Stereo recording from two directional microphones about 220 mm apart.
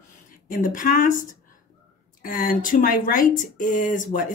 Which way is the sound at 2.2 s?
40° left (ahead or behind).